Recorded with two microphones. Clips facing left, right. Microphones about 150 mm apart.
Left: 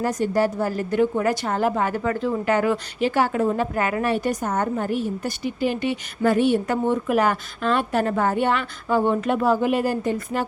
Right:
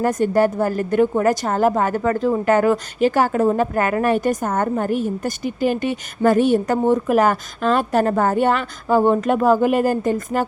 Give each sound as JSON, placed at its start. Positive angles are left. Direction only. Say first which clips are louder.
{"t": 0.0, "sound": "a woman's voice", "louder": "right 4 dB", "side_deg": -55}